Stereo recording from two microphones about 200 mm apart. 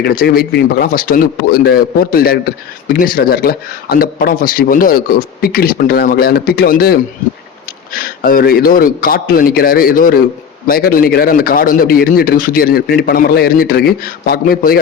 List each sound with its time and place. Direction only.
0.0 s a man's voice: 50° left (ahead or behind)